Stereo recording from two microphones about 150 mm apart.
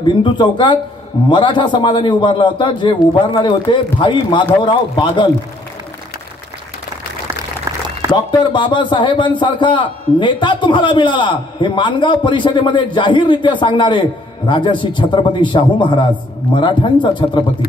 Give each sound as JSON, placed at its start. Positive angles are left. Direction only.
{"t": 0.0, "sound": "a man's voice", "side_deg": 30}
{"t": 8.1, "sound": "a man's voice", "side_deg": 30}